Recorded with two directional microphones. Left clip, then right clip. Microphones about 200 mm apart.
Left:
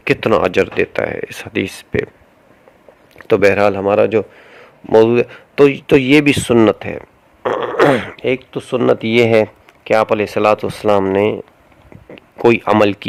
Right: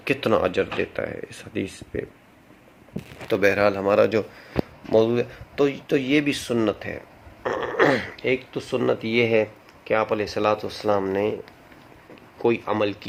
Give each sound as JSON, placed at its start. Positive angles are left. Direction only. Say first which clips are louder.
{"t": 0.0, "sound": "a man's voice", "louder": "left 8 dB", "side_deg": 40}
{"t": 3.2, "sound": "a man's voice", "louder": "left 8 dB", "side_deg": 50}